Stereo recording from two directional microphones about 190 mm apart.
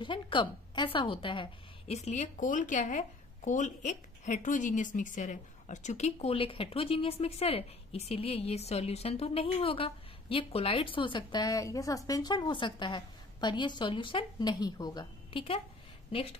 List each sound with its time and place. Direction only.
0.0 s a woman's voice: 25° left (ahead or behind)